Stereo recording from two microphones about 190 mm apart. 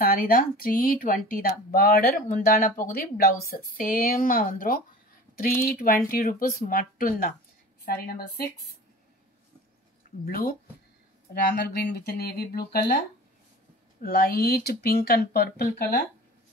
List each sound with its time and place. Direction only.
0.0 s speech: 50° left (ahead or behind)
10.2 s speech: 50° left (ahead or behind)
14.0 s speech: 55° left (ahead or behind)